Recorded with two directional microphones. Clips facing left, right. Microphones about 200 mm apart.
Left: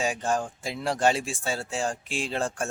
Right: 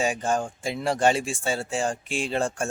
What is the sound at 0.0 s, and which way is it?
Speech, centre (ahead or behind).